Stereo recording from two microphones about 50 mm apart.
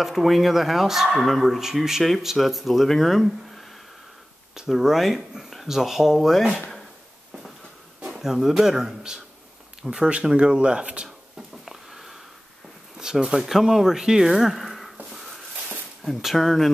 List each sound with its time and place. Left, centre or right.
0.0 s speech: centre
8.1 s speech: centre
11.1 s a sound: centre
12.9 s speech: centre
15.0 s a sound: centre
16.0 s speech: centre